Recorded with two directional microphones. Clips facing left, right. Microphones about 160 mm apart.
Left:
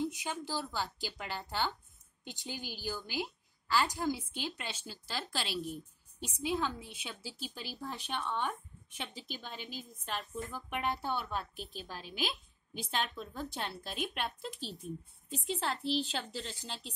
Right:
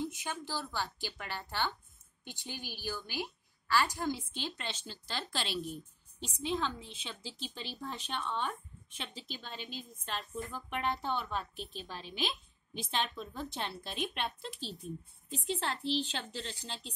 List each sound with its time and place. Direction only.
0.1 s a woman's voice: 15° left (ahead or behind)